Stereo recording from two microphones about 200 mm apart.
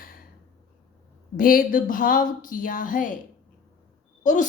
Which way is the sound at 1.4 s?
45° left (ahead or behind).